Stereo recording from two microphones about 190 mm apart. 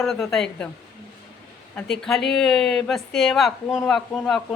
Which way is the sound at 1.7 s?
5° left (ahead or behind).